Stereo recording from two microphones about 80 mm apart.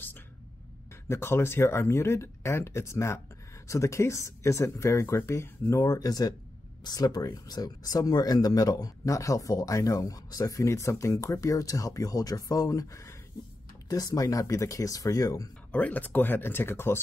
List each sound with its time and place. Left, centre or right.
1.0 s speech: left
15.7 s speech: centre